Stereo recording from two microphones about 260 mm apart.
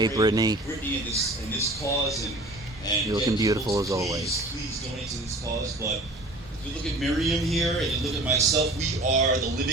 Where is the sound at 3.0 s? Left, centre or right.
Centre.